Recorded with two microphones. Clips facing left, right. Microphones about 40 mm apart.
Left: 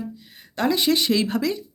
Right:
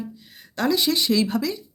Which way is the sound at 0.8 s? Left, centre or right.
Left.